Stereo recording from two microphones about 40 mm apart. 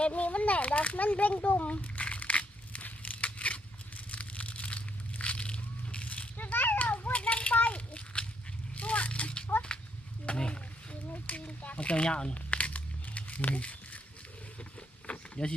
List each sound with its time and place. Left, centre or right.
0.0 s speech: left
1.8 s crumpling: left
6.3 s a sound: left
6.8 s children playing: left
7.2 s a sound: left
11.1 s a child's voice: left
12.3 s crumpling: left
14.6 s insect: left